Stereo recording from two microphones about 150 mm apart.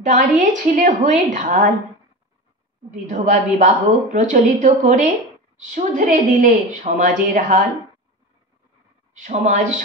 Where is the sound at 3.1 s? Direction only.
50° right (ahead or behind).